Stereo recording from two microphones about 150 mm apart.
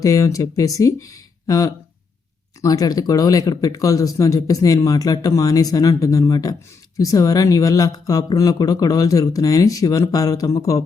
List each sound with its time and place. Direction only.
0.0 s speech: 20° left (ahead or behind)